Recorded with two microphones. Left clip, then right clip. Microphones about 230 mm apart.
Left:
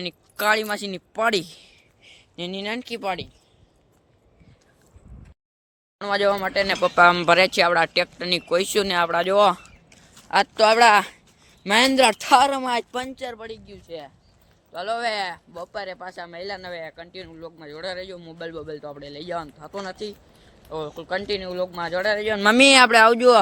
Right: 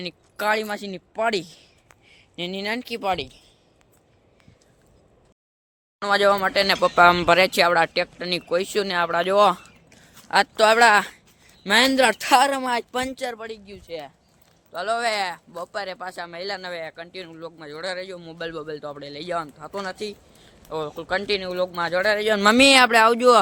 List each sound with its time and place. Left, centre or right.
0.0 s speech: centre
2.3 s speech: centre
6.0 s speech: centre
10.2 s a sound: centre
10.6 s speech: centre
22.2 s speech: right
22.6 s speech: centre